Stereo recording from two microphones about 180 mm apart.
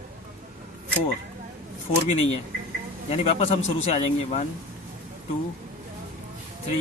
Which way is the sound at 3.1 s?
35° left (ahead or behind).